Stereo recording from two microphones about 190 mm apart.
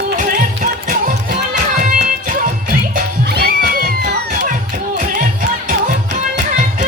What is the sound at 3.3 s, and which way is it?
Music, 55° right (ahead or behind).